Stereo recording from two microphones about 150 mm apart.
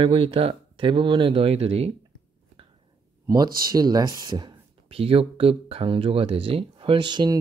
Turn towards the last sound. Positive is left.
turn(degrees=-30)  # may be behind; listen again after turning